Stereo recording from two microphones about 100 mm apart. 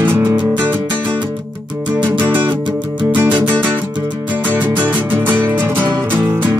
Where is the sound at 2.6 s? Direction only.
50° right (ahead or behind).